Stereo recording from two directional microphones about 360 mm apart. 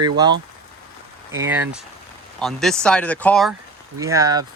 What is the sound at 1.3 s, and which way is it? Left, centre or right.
Speech, centre.